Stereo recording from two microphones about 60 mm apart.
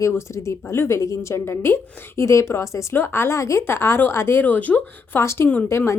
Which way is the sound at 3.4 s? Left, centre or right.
Left.